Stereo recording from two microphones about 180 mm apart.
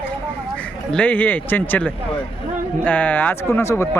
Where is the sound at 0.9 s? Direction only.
10° left (ahead or behind).